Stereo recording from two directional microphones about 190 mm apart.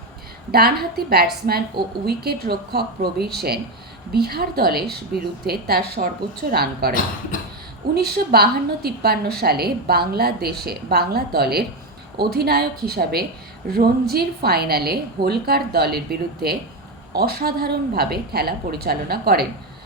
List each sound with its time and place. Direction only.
0.5 s a woman's voice: 55° right (ahead or behind)
7.9 s a woman's voice: 55° right (ahead or behind)